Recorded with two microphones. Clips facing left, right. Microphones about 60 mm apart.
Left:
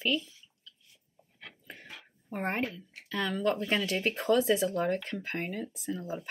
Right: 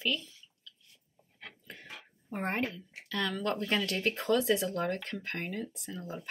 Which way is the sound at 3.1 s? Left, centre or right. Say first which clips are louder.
Left 3 dB; centre.